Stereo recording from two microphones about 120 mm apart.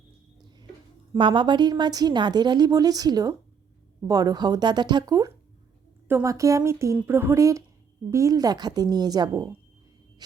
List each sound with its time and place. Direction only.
1.2 s a woman's voice: 40° right (ahead or behind)
6.1 s a woman's voice: 20° right (ahead or behind)